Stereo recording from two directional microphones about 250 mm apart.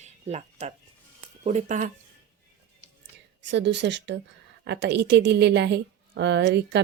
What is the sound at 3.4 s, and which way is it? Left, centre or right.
A woman's voice, right.